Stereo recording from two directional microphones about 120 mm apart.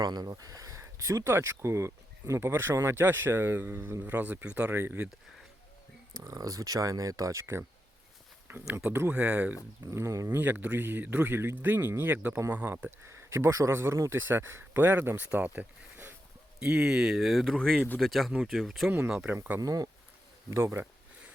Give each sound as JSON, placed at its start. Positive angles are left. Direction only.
{"t": 0.0, "sound": "speech", "side_deg": -35}
{"t": 6.1, "sound": "a man's voice", "side_deg": -30}
{"t": 9.8, "sound": "a man's voice", "side_deg": -25}
{"t": 18.9, "sound": "a man's voice", "side_deg": -10}
{"t": 19.5, "sound": "speech", "side_deg": -30}